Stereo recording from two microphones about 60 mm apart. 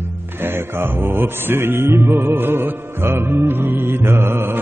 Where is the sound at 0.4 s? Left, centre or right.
Right.